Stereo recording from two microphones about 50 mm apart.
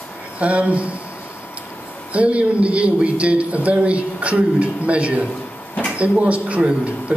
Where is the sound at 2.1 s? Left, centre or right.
Right.